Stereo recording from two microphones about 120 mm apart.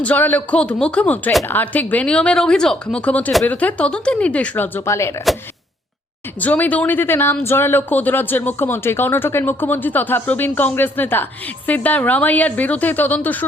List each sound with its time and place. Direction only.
0.0 s speech: 15° left (ahead or behind)
6.4 s speech: 15° left (ahead or behind)